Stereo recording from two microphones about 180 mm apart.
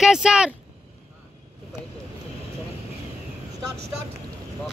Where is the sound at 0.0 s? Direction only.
5° right (ahead or behind).